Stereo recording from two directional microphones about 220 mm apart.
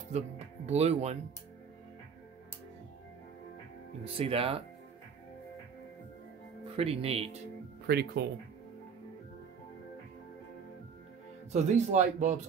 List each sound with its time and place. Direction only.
0.7 s speech: 30° right (ahead or behind)
4.0 s speech: 25° right (ahead or behind)
6.8 s speech: 25° right (ahead or behind)
7.8 s speech: 50° right (ahead or behind)
11.5 s speech: 30° right (ahead or behind)